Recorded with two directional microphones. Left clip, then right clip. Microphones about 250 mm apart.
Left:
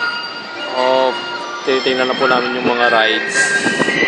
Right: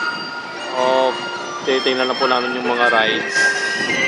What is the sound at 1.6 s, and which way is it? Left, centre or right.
Speech, centre.